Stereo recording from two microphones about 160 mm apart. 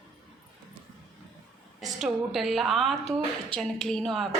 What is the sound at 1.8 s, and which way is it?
A woman's voice, centre (ahead or behind).